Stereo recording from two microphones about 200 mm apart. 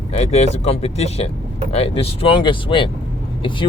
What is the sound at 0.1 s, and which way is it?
Speech, 35° left (ahead or behind).